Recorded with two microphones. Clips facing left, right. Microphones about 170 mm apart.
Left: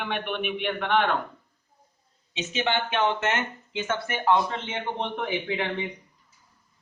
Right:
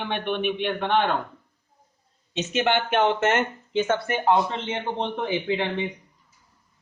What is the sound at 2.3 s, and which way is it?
Speech, 50° right (ahead or behind).